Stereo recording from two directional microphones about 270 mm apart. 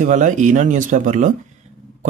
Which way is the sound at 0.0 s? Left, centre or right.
Right.